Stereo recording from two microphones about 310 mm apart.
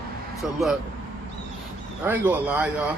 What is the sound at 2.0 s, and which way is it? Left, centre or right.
Speech, centre.